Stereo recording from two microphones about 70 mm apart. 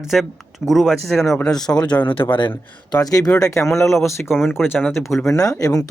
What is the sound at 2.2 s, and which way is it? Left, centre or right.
Speech, left.